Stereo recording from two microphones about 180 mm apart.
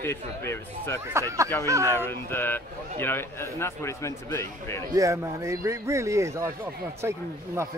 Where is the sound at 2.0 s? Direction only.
10° left (ahead or behind).